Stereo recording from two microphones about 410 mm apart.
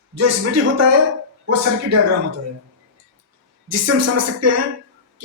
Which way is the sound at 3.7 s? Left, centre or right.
Right.